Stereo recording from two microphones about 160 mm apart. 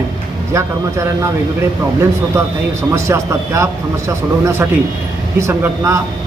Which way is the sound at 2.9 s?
15° right (ahead or behind).